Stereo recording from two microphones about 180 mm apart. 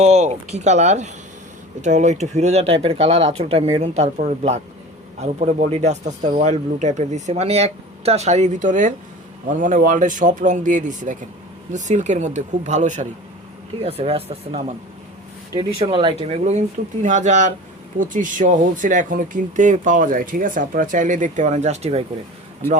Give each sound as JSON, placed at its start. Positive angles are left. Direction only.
{"t": 0.0, "sound": "speech", "side_deg": -40}
{"t": 22.6, "sound": "speech", "side_deg": 15}